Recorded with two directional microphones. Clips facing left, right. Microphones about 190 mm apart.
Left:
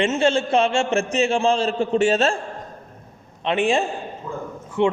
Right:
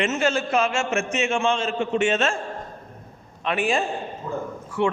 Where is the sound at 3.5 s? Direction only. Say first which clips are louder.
Left 3 dB; 25° left (ahead or behind).